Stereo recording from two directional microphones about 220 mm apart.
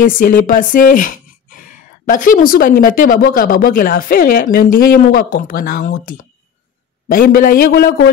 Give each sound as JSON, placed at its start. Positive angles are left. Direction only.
{"t": 0.0, "sound": "speech", "side_deg": 40}